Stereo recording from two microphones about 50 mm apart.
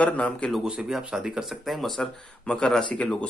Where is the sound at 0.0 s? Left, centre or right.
Left.